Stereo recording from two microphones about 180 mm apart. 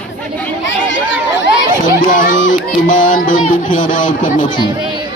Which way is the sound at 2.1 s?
45° left (ahead or behind).